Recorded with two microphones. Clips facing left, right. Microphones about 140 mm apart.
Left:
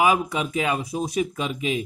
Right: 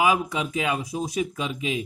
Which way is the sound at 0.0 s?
55° left (ahead or behind).